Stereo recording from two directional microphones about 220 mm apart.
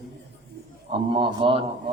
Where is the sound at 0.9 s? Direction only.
25° right (ahead or behind).